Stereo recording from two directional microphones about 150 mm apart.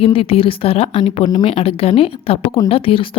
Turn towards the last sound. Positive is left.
turn(degrees=35)  # may be behind; listen again after turning